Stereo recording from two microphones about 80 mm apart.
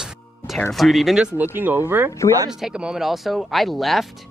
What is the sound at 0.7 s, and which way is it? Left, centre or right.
Speech, centre.